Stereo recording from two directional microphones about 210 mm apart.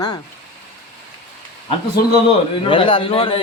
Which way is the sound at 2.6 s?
25° left (ahead or behind).